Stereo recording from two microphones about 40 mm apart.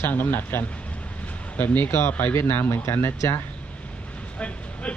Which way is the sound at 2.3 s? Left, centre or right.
Left.